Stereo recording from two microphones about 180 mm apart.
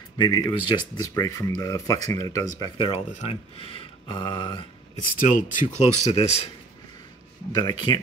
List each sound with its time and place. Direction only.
0.2 s speech: 25° left (ahead or behind)
3.1 s speech: 35° left (ahead or behind)
5.1 s speech: 50° left (ahead or behind)
7.5 s speech: 25° left (ahead or behind)